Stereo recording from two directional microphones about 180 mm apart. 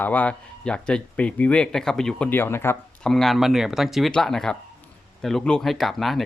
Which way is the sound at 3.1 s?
Centre (ahead or behind).